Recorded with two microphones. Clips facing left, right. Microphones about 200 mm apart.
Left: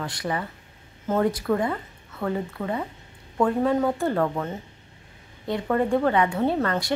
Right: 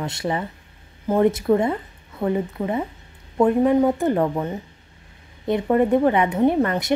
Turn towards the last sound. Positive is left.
turn(degrees=-20)  # may be behind; listen again after turning